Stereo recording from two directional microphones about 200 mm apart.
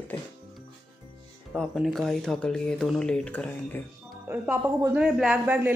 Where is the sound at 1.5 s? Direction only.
Centre (ahead or behind).